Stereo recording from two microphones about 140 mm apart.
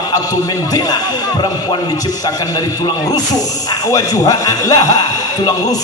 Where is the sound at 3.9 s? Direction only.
25° left (ahead or behind).